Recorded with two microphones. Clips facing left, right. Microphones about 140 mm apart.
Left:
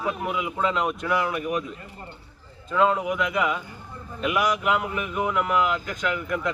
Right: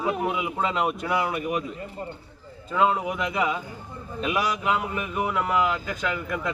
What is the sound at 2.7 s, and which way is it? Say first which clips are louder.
Speech: left 1 dB; 25° right (ahead or behind).